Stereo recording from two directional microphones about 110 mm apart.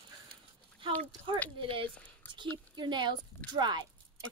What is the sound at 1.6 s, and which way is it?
Speech, 55° right (ahead or behind).